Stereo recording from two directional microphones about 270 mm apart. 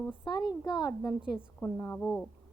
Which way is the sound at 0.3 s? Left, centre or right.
Centre.